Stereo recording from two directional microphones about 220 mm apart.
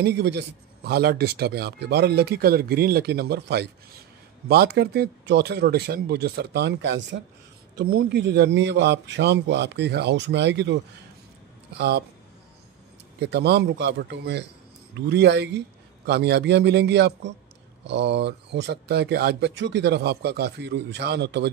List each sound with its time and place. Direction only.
0.0 s speech: 50° right (ahead or behind)
13.2 s speech: 50° right (ahead or behind)